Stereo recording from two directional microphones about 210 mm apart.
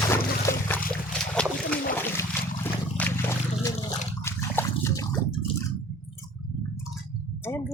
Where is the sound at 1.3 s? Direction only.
5° left (ahead or behind).